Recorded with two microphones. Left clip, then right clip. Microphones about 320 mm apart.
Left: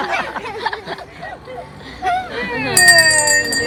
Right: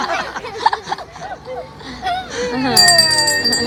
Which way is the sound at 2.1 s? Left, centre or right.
Centre.